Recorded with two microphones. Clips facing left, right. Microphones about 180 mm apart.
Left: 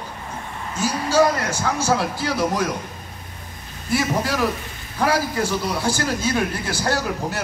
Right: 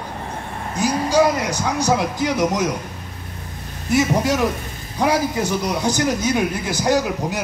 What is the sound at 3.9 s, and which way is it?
A man's voice, 20° right (ahead or behind).